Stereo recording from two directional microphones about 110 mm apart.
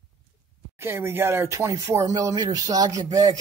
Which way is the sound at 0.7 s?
20° right (ahead or behind).